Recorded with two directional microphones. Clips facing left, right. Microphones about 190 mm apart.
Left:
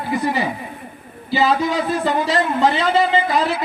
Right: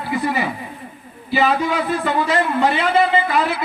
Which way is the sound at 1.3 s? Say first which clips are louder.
Even; 35° left (ahead or behind).